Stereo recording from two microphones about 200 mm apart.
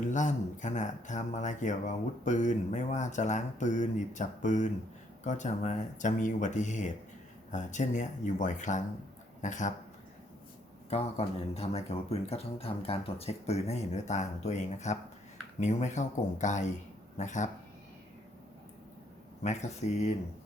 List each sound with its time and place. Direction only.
0.1 s speech: 40° left (ahead or behind)
10.8 s speech: 30° left (ahead or behind)
19.4 s speech: 35° left (ahead or behind)